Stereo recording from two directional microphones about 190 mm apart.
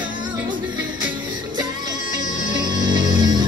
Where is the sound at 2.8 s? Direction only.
20° right (ahead or behind).